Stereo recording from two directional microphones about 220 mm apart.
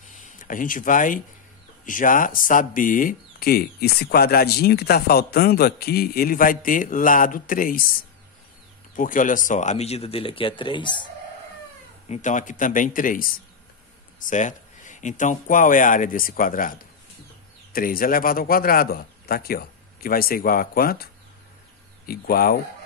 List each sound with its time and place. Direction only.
0.2 s speech: 35° left (ahead or behind)
8.9 s speech: 35° left (ahead or behind); by 11.1 s 20° left (ahead or behind)
12.1 s speech: 35° left (ahead or behind)